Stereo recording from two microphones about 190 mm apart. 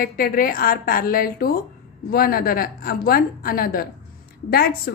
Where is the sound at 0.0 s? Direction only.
50° left (ahead or behind).